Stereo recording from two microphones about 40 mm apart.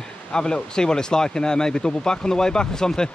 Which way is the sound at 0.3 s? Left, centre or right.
Centre.